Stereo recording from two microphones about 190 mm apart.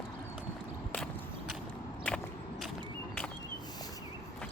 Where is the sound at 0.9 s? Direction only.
5° left (ahead or behind).